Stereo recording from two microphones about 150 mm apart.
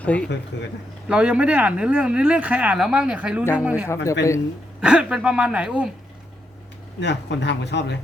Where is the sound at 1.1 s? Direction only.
5° right (ahead or behind).